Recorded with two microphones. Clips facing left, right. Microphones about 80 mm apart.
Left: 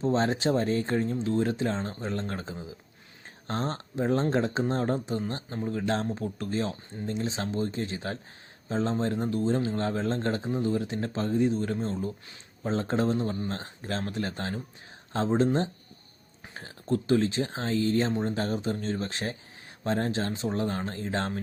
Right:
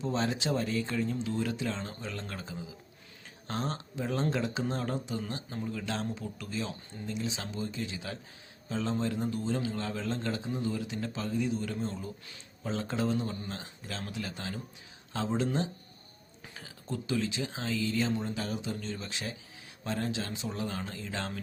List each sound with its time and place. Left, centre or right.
0.0 s speech: left
16.6 s speech: left